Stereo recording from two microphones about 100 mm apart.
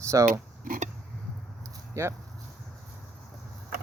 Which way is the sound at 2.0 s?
30° right (ahead or behind).